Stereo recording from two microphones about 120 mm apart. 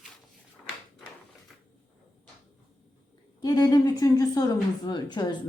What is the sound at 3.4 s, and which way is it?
A woman's voice, 35° left (ahead or behind).